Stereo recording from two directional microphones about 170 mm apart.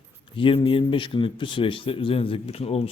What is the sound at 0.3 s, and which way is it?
A man's voice, 35° left (ahead or behind).